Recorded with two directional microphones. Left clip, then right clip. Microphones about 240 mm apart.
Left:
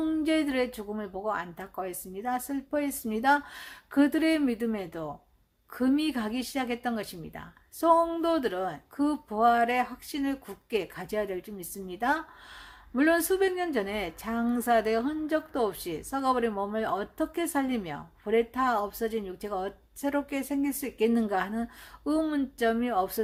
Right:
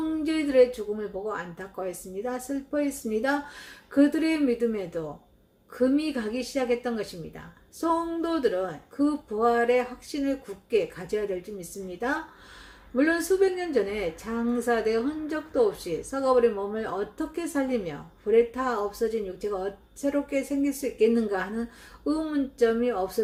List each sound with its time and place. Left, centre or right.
0.2 s a woman's voice: left